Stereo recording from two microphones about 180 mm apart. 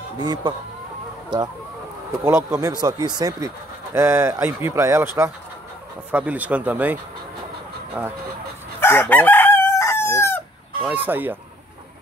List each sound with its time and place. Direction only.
0.2 s speech: 25° right (ahead or behind)
8.8 s chicken: 10° left (ahead or behind)
10.9 s speech: 10° right (ahead or behind)